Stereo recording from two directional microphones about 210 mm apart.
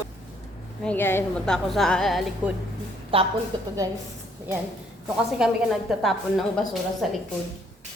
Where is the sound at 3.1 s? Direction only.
25° right (ahead or behind).